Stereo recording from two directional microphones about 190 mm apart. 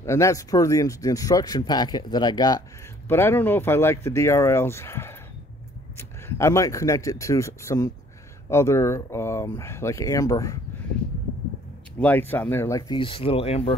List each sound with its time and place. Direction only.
0.0 s speech: 15° left (ahead or behind)
12.0 s speech: 10° left (ahead or behind); by 13.7 s 30° left (ahead or behind)